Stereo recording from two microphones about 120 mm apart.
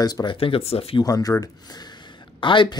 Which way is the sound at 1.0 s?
30° left (ahead or behind).